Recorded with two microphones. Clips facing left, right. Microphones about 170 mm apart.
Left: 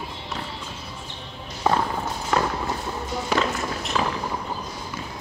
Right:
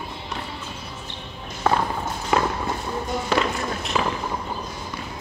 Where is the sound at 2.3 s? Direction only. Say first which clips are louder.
Right 2 dB; 5° right (ahead or behind).